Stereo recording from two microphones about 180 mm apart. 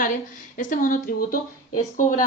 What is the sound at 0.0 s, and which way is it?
A woman's voice, 45° left (ahead or behind).